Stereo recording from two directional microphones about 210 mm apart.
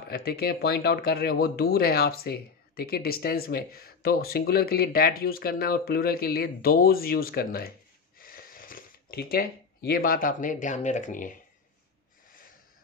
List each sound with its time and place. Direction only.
0.1 s speech: 50° left (ahead or behind)